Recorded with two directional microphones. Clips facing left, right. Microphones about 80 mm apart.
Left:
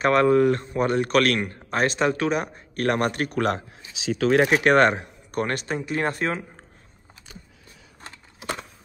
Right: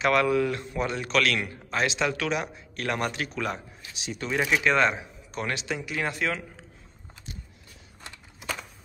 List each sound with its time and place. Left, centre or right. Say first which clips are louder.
0.0 s a man's voice: left 5 dB; left